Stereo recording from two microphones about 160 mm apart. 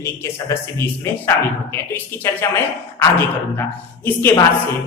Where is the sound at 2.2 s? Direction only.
15° left (ahead or behind).